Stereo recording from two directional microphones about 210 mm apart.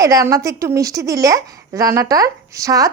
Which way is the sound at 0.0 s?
15° right (ahead or behind).